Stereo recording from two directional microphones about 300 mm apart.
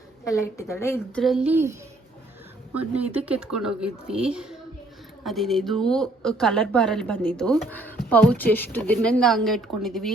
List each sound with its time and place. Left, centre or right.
0.3 s a woman's voice: centre
2.7 s a woman's voice: centre